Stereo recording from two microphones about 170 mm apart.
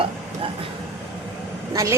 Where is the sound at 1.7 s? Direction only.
20° right (ahead or behind).